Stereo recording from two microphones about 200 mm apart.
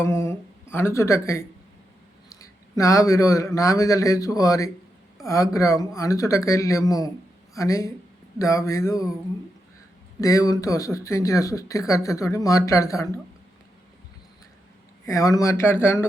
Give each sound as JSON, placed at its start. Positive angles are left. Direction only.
{"t": 0.0, "sound": "speech", "side_deg": 15}
{"t": 10.2, "sound": "speech", "side_deg": 15}
{"t": 15.0, "sound": "speech", "side_deg": 15}